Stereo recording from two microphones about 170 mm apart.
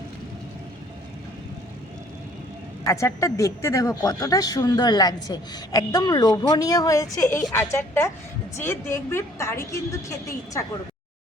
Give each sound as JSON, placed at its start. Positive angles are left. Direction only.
{"t": 2.8, "sound": "a woman's voice", "side_deg": 20}